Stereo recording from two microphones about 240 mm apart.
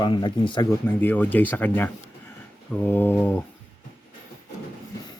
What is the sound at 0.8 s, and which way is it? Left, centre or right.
Speech, centre.